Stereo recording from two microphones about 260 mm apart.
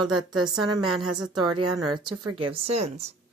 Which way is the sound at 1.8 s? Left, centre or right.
Centre.